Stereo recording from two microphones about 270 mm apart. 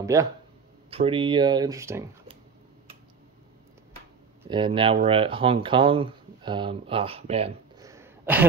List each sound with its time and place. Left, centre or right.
0.0 s speech: centre
4.5 s speech: centre
7.9 s a sound: centre